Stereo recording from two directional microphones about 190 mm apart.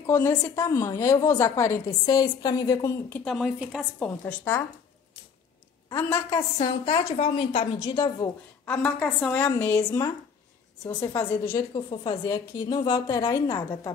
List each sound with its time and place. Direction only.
0.0 s a woman's voice: 15° left (ahead or behind)
3.3 s speech: centre (ahead or behind)
4.3 s a woman's voice: 10° left (ahead or behind)
5.9 s a woman's voice: 15° left (ahead or behind)
8.8 s a woman's voice: 5° left (ahead or behind)
9.8 s a woman's voice: 20° left (ahead or behind)